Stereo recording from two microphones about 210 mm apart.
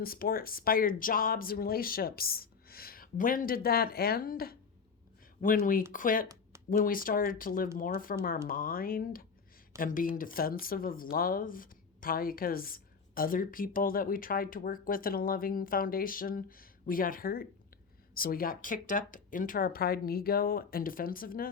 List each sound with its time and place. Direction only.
0.0 s speech: 45° left (ahead or behind)